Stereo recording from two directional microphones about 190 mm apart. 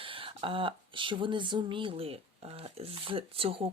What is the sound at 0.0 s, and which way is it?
Speech, 30° right (ahead or behind).